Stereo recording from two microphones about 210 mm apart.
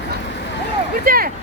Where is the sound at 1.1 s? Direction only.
45° right (ahead or behind).